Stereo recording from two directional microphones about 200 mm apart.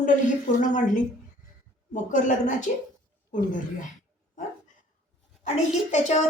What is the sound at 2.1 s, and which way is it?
Speech, 40° left (ahead or behind).